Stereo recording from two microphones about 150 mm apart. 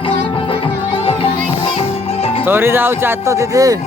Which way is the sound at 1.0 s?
40° left (ahead or behind).